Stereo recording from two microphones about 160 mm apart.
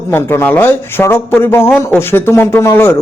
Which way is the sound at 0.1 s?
15° left (ahead or behind).